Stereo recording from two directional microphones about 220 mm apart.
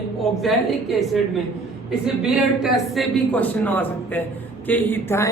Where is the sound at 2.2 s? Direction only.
Centre (ahead or behind).